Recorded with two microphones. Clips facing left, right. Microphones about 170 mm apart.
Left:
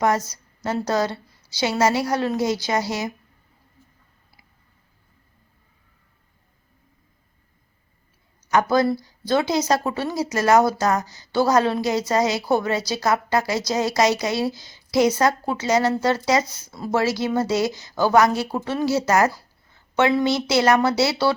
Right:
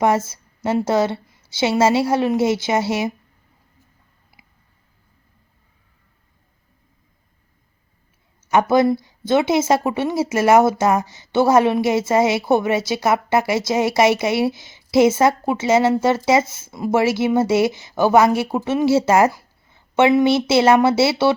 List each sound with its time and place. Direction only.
0.0 s speech: 25° right (ahead or behind)
8.4 s speech: 25° right (ahead or behind)